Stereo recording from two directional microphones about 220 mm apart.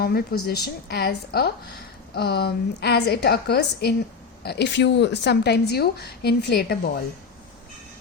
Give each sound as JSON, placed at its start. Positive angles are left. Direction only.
{"t": 0.0, "sound": "a woman's voice", "side_deg": 45}